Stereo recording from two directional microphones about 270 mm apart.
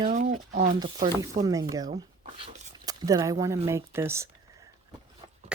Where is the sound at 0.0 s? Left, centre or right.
Right.